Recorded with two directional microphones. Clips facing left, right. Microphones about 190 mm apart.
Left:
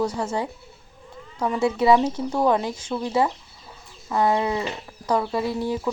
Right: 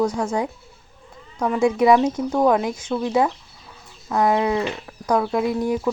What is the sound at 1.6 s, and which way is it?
Speech, 15° right (ahead or behind).